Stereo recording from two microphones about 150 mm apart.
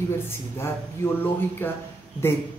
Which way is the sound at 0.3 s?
15° left (ahead or behind).